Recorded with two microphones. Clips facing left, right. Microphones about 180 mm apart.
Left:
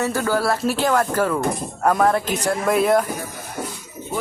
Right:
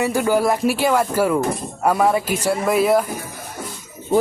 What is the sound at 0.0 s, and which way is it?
Speech, 15° right (ahead or behind).